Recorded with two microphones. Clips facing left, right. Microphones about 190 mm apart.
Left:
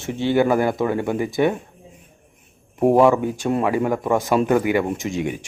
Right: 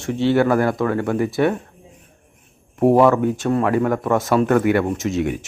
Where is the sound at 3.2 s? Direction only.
Centre (ahead or behind).